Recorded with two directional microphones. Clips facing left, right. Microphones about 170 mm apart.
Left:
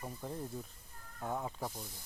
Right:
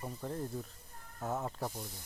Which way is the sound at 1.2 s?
5° right (ahead or behind).